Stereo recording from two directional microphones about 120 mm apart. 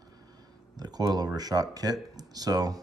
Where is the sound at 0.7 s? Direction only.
35° right (ahead or behind).